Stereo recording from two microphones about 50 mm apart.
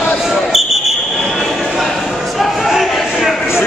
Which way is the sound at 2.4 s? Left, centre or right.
Centre.